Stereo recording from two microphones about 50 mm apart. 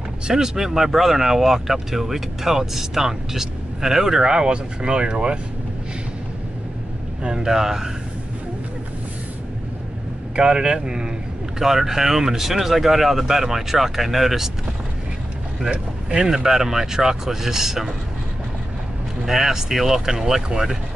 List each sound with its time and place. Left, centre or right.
0.3 s speech: centre
7.2 s speech: centre
10.3 s speech: centre
15.7 s speech: right
16.3 s speech: centre
19.2 s speech: centre